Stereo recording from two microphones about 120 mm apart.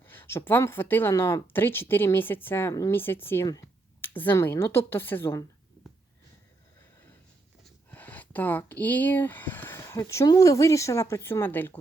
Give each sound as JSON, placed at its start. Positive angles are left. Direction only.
{"t": 0.0, "sound": "speech", "side_deg": 15}
{"t": 7.9, "sound": "speech", "side_deg": 15}